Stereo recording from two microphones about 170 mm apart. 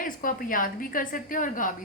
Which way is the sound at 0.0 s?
55° left (ahead or behind).